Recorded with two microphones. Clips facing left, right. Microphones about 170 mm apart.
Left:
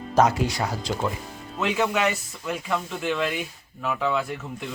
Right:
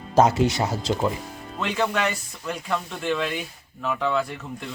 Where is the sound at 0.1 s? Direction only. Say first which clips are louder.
Right 2 dB; 25° right (ahead or behind).